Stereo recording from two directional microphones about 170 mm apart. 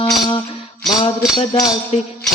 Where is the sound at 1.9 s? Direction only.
40° left (ahead or behind).